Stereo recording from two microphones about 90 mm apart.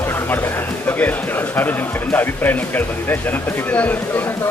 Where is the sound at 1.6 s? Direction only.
20° left (ahead or behind).